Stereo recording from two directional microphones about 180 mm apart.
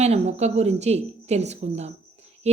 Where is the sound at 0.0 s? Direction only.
35° right (ahead or behind).